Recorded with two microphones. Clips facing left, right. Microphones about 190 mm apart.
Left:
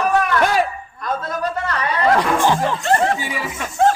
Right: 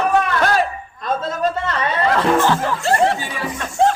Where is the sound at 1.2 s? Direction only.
25° right (ahead or behind).